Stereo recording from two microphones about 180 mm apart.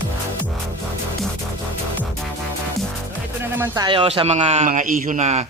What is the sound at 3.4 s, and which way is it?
A man's voice, 15° right (ahead or behind).